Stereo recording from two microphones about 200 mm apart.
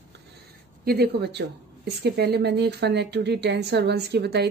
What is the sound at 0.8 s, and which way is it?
A woman's voice, 50° right (ahead or behind).